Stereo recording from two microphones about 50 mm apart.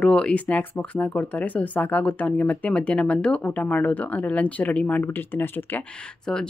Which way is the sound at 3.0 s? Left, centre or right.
Left.